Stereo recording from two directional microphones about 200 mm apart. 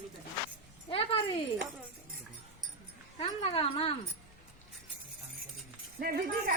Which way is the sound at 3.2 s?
30° left (ahead or behind).